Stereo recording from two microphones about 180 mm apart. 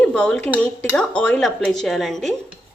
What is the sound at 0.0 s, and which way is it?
A woman's voice, 5° left (ahead or behind).